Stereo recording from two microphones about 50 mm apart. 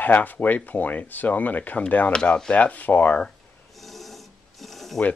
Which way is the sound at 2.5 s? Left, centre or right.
Left.